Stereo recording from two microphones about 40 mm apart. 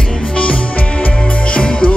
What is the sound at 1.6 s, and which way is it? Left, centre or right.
Music, left.